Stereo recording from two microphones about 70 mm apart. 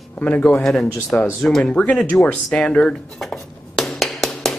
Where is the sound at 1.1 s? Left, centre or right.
Left.